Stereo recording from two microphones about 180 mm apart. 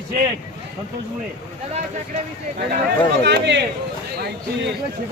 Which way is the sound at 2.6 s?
60° right (ahead or behind).